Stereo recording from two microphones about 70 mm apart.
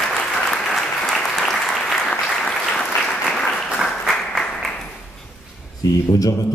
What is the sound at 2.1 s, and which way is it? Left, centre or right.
Applause, centre.